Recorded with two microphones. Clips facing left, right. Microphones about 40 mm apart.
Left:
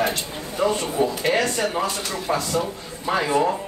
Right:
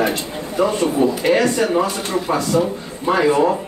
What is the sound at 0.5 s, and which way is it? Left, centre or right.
A man's voice, centre.